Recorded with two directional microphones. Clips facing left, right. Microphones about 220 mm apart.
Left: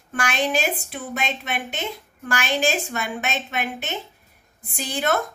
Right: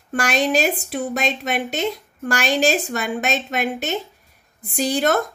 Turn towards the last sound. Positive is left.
turn(degrees=-40)  # may be behind; listen again after turning